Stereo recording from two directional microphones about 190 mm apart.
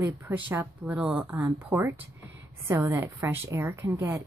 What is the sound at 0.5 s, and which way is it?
A woman's voice, 10° right (ahead or behind).